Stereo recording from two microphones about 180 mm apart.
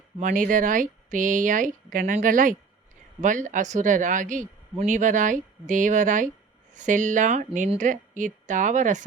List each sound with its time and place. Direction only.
0.2 s speech: 45° right (ahead or behind)